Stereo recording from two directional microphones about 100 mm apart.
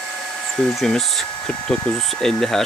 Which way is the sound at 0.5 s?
10° left (ahead or behind).